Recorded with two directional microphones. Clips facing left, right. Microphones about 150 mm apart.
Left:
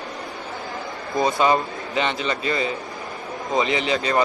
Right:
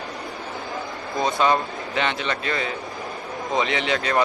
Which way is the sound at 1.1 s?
5° left (ahead or behind).